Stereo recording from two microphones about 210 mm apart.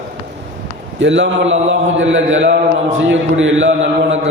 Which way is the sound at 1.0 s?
60° right (ahead or behind).